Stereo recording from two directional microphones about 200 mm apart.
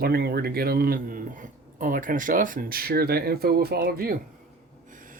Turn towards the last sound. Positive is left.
turn(degrees=-50)  # may be behind; listen again after turning